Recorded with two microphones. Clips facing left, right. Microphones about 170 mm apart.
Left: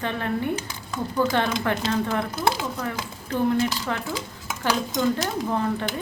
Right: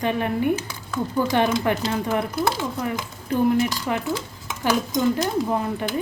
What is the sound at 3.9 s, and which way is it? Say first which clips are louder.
Speech: right 3 dB; 15° right (ahead or behind).